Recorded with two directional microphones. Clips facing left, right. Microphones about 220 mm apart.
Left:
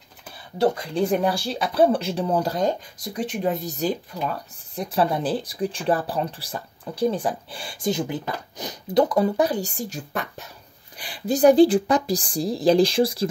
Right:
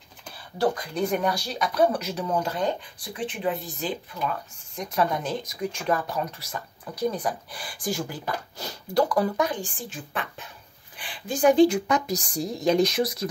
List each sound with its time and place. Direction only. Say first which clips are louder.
0.6 s speech: left 4 dB; 25° left (ahead or behind)
9.4 s speech: left 5 dB; 40° left (ahead or behind)